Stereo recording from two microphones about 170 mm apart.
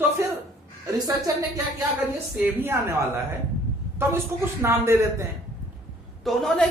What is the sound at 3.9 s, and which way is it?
A woman's voice, 15° right (ahead or behind).